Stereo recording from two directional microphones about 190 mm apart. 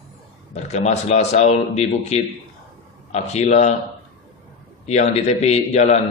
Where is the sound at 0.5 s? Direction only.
40° left (ahead or behind).